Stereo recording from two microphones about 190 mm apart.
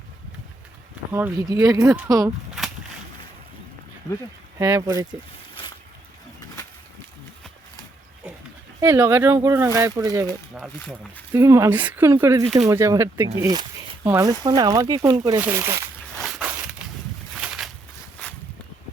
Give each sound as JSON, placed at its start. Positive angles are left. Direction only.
{"t": 1.1, "sound": "speech", "side_deg": -15}
{"t": 4.5, "sound": "speech", "side_deg": -15}
{"t": 8.8, "sound": "speech", "side_deg": -15}
{"t": 10.5, "sound": "speech", "side_deg": -5}
{"t": 16.1, "sound": "walk", "side_deg": 0}